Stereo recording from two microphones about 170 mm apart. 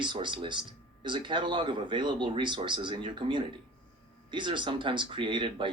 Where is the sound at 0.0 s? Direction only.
30° right (ahead or behind).